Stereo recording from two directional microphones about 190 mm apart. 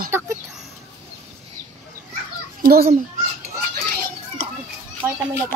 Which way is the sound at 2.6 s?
50° right (ahead or behind).